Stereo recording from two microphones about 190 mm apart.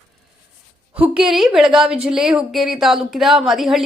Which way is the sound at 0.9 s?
5° right (ahead or behind).